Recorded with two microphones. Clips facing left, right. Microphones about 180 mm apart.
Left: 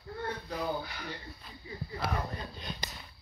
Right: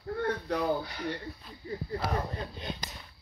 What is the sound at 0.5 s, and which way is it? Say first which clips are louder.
Speech: right 6 dB; 70° right (ahead or behind).